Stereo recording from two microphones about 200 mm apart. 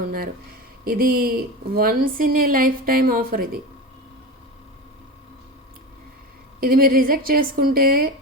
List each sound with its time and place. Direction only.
0.9 s a woman's voice: 45° right (ahead or behind)
6.6 s a woman's voice: 45° right (ahead or behind)